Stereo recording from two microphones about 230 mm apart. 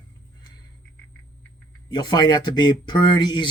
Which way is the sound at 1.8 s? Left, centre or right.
Centre.